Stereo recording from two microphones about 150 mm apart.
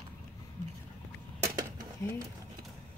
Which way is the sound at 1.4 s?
25° right (ahead or behind).